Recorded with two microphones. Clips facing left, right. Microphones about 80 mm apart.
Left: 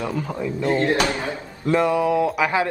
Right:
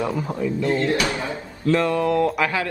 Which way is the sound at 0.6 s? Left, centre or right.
Left.